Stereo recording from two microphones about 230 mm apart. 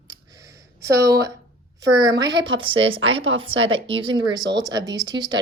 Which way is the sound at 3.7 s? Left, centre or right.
Right.